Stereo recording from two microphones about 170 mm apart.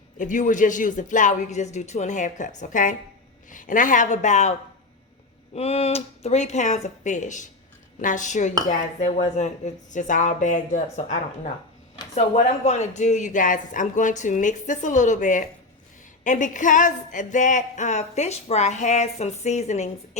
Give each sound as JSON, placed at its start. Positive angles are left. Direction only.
{"t": 0.2, "sound": "speech", "side_deg": 50}
{"t": 5.5, "sound": "speech", "side_deg": 35}